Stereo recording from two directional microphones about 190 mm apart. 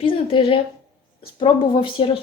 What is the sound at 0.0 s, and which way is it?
Speech, 30° left (ahead or behind).